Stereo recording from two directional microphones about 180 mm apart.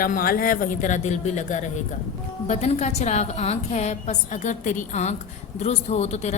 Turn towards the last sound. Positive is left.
turn(degrees=40)  # may be behind; listen again after turning